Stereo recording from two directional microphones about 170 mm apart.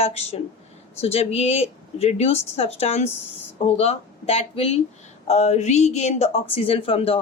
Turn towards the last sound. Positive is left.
turn(degrees=35)  # may be behind; listen again after turning